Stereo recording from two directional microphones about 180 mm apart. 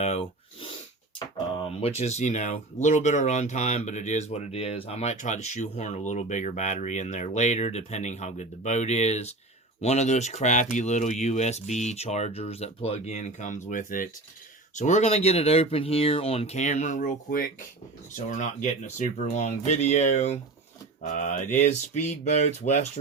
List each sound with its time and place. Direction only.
0.0 s a sound: 35° left (ahead or behind)
1.8 s speech: 35° left (ahead or behind); by 17.5 s 55° left (ahead or behind)
18.3 s speech: 40° left (ahead or behind)